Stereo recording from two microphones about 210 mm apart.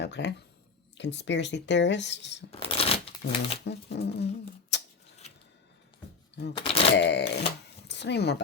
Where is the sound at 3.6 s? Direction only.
55° left (ahead or behind).